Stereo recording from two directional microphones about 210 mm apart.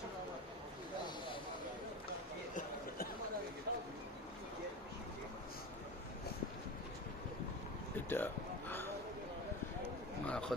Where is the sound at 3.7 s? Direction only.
45° right (ahead or behind).